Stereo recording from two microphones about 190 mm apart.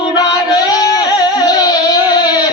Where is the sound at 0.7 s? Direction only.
20° left (ahead or behind).